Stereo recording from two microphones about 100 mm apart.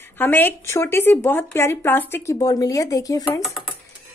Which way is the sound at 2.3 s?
35° left (ahead or behind).